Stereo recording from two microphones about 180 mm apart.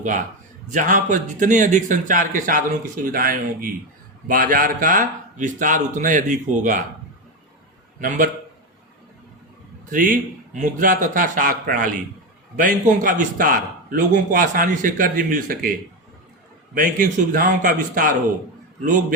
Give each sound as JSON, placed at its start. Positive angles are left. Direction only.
{"t": 0.0, "sound": "a man's voice", "side_deg": -45}
{"t": 9.9, "sound": "a man's voice", "side_deg": -50}
{"t": 16.7, "sound": "a man's voice", "side_deg": -50}